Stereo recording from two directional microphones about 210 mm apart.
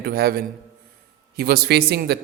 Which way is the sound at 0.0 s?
45° right (ahead or behind).